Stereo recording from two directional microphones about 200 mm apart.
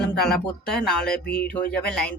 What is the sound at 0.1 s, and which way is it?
Speech, centre (ahead or behind).